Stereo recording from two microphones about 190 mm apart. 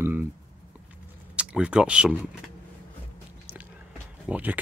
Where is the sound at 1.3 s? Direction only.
5° right (ahead or behind).